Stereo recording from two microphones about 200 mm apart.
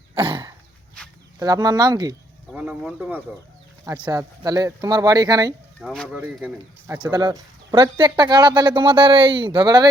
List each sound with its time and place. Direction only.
0.2 s throat clearing: 25° right (ahead or behind)
1.0 s a sound: 5° left (ahead or behind)
1.4 s speech: 20° right (ahead or behind)
2.5 s speech: 5° right (ahead or behind)
4.0 s speech: 20° right (ahead or behind)
5.8 s speech: centre (ahead or behind)
7.0 s speech: 20° right (ahead or behind)